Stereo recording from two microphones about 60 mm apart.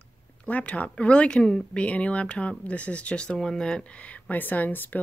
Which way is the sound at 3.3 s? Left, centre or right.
Centre.